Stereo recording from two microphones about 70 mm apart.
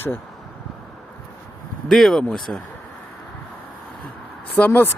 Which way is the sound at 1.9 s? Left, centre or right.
Centre.